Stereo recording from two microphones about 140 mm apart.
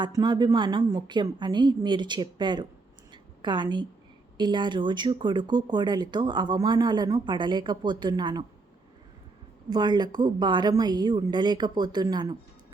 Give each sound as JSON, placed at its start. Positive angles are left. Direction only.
{"t": 0.0, "sound": "speech", "side_deg": -30}
{"t": 3.1, "sound": "a sound", "side_deg": -35}
{"t": 4.4, "sound": "speech", "side_deg": -30}
{"t": 9.6, "sound": "speech", "side_deg": -30}